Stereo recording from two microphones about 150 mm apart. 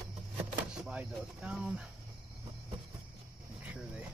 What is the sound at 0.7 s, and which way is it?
Speech, 5° right (ahead or behind).